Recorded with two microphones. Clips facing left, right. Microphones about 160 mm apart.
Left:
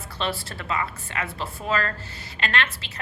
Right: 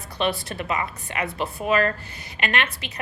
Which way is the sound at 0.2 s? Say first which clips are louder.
Right 4 dB; 20° right (ahead or behind).